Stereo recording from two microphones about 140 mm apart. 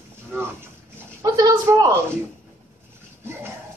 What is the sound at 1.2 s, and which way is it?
Speech, 25° right (ahead or behind).